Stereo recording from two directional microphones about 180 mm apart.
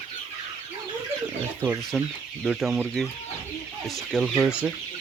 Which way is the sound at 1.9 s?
5° left (ahead or behind).